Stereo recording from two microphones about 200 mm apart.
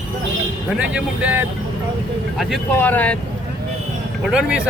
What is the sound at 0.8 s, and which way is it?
Speech, 5° right (ahead or behind).